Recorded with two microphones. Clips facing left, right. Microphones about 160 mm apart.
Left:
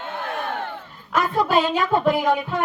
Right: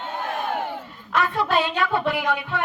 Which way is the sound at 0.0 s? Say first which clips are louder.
Right 1 dB; 15° right (ahead or behind).